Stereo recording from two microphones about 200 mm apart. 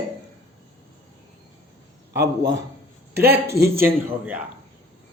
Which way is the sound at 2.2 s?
15° right (ahead or behind).